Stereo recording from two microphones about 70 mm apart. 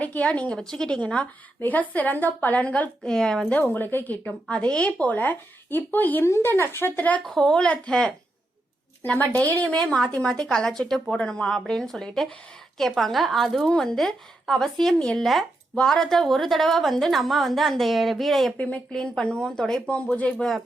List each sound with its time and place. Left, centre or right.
0.0 s a woman's voice: left
3.0 s speech: centre
3.5 s a woman's voice: left
7.3 s speech: centre
9.3 s a woman's voice: left
9.7 s a woman's voice: centre
18.5 s speech: centre